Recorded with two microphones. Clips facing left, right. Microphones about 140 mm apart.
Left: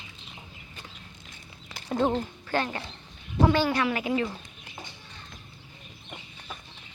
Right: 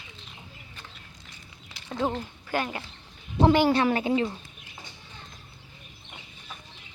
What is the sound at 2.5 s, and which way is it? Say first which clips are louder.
Speech: left 1 dB; 15° right (ahead or behind).